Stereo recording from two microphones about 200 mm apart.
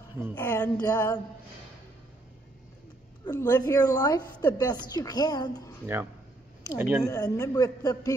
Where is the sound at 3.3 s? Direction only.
15° left (ahead or behind).